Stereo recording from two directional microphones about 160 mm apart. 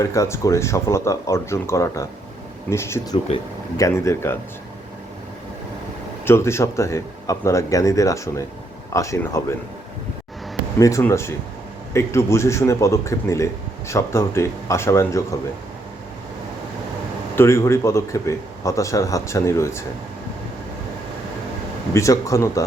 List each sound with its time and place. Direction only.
0.0 s a man's voice: 20° left (ahead or behind)
6.2 s speech: 15° left (ahead or behind)
10.8 s a man's voice: 20° left (ahead or behind)
17.3 s a man's voice: 15° left (ahead or behind)
21.9 s speech: 20° left (ahead or behind)